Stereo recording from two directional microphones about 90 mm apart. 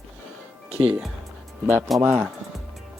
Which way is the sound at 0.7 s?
90° right.